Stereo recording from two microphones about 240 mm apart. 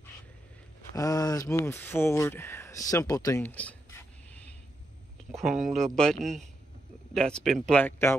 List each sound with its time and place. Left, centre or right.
0.9 s speech: centre